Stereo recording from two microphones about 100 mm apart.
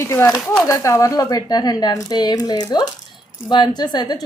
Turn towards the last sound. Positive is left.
turn(degrees=45)  # may be behind; listen again after turning